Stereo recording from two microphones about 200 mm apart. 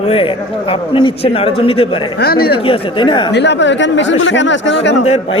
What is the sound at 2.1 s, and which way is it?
Speech, 50° left (ahead or behind).